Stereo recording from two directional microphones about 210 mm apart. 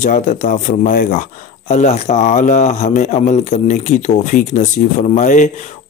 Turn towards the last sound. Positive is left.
turn(degrees=35)  # may be behind; listen again after turning